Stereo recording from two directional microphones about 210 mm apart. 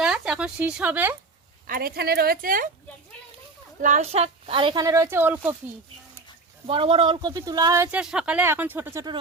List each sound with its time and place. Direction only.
0.0 s speech: 5° right (ahead or behind)
1.6 s a woman's voice: 45° right (ahead or behind)
3.8 s a woman's voice: 35° right (ahead or behind); by 5.5 s 10° right (ahead or behind)
6.7 s speech: 25° right (ahead or behind)